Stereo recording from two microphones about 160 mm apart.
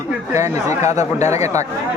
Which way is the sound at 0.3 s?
20° right (ahead or behind).